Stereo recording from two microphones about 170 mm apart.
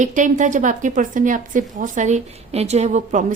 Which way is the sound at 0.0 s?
50° right (ahead or behind).